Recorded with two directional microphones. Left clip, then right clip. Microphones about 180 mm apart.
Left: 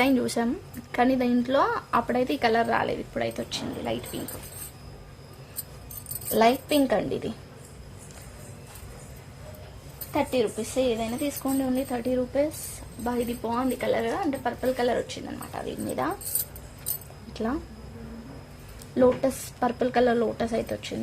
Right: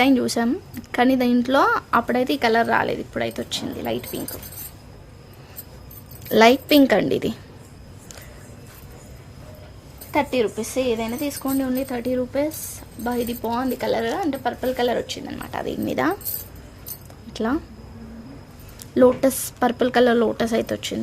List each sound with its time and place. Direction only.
0.0 s speech: 30° right (ahead or behind)
6.3 s speech: 50° right (ahead or behind)
10.1 s speech: 45° right (ahead or behind)
17.3 s speech: 40° right (ahead or behind)
18.9 s speech: 45° right (ahead or behind)